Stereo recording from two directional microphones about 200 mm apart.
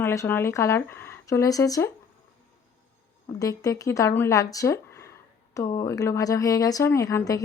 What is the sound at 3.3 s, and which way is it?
A woman's voice, 15° left (ahead or behind).